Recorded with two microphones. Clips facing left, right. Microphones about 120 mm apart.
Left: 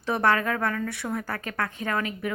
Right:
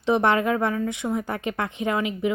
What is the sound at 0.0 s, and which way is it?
A woman's voice, 20° right (ahead or behind).